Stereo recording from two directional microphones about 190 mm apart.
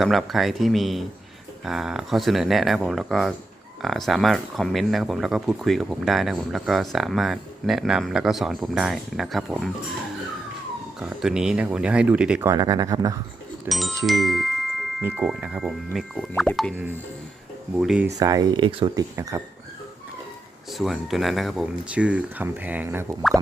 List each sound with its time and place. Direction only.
0.0 s speech: centre (ahead or behind)
11.0 s speech: 5° right (ahead or behind)
12.5 s speech: 20° right (ahead or behind)
13.7 s speech: centre (ahead or behind)
17.7 s speech: 5° right (ahead or behind)
18.2 s speech: 20° right (ahead or behind)
20.7 s speech: centre (ahead or behind)